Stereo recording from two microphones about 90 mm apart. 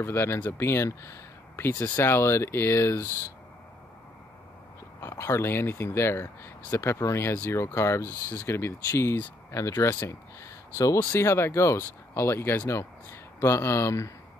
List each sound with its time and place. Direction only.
0.0 s speech: 30° left (ahead or behind)
5.0 s speech: 35° left (ahead or behind)